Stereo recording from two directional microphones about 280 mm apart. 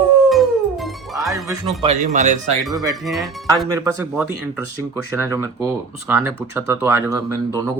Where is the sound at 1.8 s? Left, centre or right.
Right.